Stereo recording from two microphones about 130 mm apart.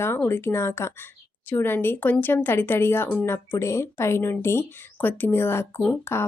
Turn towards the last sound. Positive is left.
turn(degrees=20)  # may be behind; listen again after turning